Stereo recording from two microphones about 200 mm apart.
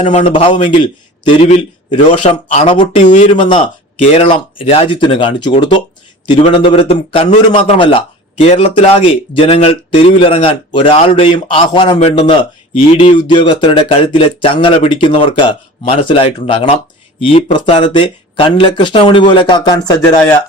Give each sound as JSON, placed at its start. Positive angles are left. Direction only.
{"t": 0.0, "sound": "a man's voice", "side_deg": 35}
{"t": 3.0, "sound": "speech", "side_deg": 40}
{"t": 3.3, "sound": "a man's voice", "side_deg": 25}
{"t": 6.4, "sound": "a man's voice", "side_deg": 35}